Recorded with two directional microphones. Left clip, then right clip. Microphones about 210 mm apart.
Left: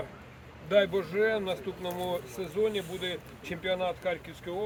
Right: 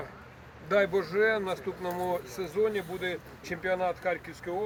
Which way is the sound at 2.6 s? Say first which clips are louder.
Even; 10° right (ahead or behind).